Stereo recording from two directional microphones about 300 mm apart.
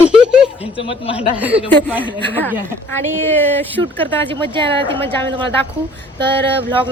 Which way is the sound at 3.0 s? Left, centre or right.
Right.